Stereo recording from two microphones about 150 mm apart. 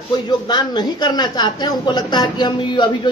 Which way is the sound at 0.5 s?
30° left (ahead or behind).